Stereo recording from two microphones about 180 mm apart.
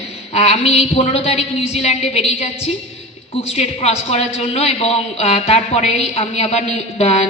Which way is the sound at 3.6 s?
35° left (ahead or behind).